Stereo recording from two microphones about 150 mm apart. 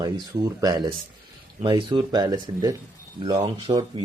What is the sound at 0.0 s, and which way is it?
Speech, 25° right (ahead or behind).